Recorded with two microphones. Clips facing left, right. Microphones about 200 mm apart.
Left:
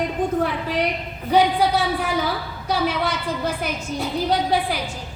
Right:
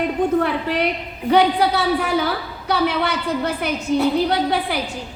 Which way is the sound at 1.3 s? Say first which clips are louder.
Right 2 dB; 65° right (ahead or behind).